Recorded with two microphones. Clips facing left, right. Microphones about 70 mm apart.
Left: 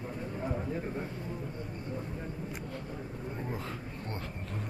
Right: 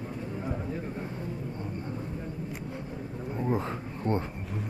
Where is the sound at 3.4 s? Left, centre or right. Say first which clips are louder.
Right 8 dB; right.